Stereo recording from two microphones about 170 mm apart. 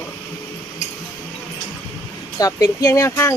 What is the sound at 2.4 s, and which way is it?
Speech, 20° left (ahead or behind).